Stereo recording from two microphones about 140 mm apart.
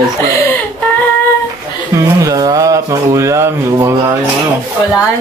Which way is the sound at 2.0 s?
25° right (ahead or behind).